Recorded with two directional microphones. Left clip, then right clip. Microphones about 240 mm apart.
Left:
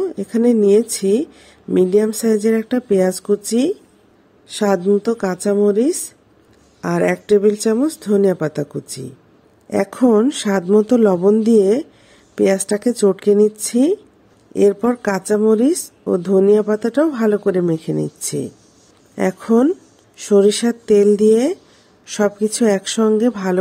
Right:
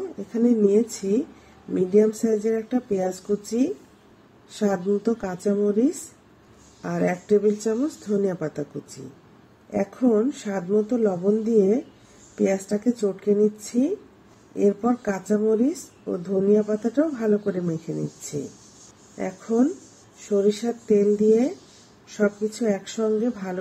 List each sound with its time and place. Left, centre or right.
0.3 s a woman's voice: left
4.6 s a woman's voice: left
9.7 s a woman's voice: left
19.1 s a woman's voice: left